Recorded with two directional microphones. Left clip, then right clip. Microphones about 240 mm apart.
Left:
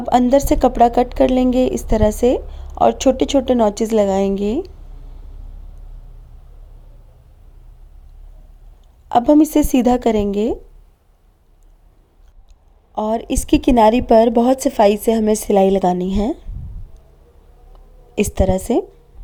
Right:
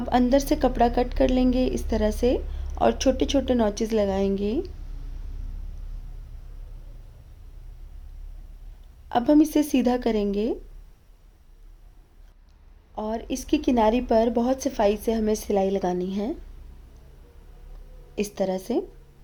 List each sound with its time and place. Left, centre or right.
0.0 s a woman's voice: left
9.0 s a woman's voice: left
12.9 s a woman's voice: left
18.1 s a woman's voice: left